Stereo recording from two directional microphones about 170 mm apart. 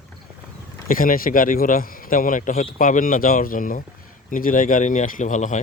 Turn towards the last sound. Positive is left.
turn(degrees=45)  # may be behind; listen again after turning